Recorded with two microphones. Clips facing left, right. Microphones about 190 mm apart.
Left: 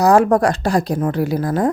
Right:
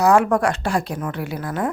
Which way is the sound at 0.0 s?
35° left (ahead or behind).